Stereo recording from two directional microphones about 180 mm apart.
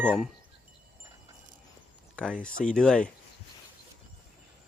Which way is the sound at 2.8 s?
5° left (ahead or behind).